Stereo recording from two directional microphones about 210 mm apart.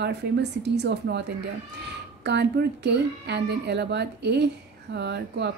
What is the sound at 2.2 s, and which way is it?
A woman's voice, 55° right (ahead or behind).